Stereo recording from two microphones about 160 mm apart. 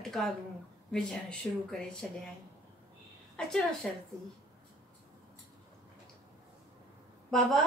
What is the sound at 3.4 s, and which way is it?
Speech, 5° left (ahead or behind).